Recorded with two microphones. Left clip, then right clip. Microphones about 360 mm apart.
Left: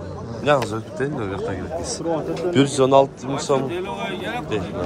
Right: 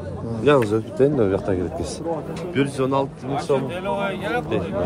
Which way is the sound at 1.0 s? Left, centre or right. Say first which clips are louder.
Right 8 dB; right.